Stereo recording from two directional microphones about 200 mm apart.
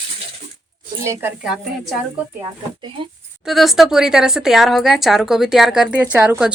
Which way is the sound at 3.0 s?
25° right (ahead or behind).